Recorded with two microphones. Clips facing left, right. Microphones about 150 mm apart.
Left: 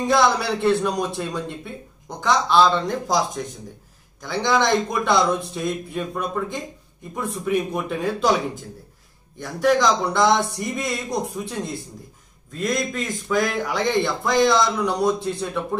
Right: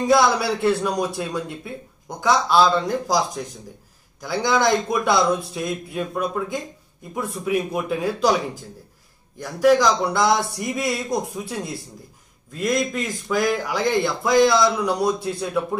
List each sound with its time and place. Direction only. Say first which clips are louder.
0.0 s a man's voice: right 1 dB; 5° right (ahead or behind)
9.4 s a man's voice: right 2 dB; 5° right (ahead or behind)